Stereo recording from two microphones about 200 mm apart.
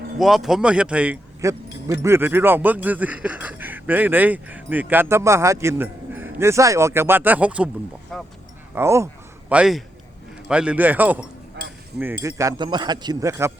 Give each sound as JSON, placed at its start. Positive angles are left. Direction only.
{"t": 0.2, "sound": "a man's voice", "side_deg": 0}
{"t": 8.7, "sound": "a man's voice", "side_deg": -15}
{"t": 12.4, "sound": "speech", "side_deg": -20}